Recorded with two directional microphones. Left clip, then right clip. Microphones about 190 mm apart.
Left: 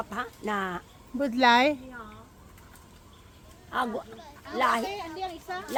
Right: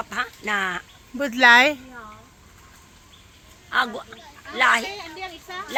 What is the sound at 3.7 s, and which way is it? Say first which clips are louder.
Speech: right 7 dB; 30° left (ahead or behind).